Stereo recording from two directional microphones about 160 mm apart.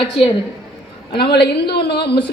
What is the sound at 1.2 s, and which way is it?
A woman's voice, 90° left.